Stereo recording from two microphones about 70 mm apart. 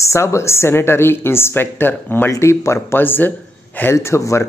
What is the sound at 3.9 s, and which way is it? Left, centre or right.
Speech, left.